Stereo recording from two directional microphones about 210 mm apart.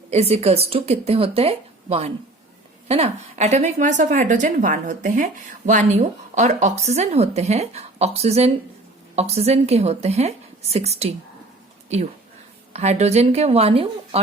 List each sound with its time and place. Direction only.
0.1 s a woman's voice: 30° right (ahead or behind)
12.7 s a woman's voice: 30° right (ahead or behind)